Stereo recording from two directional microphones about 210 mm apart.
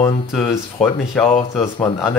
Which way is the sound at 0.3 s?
5° left (ahead or behind).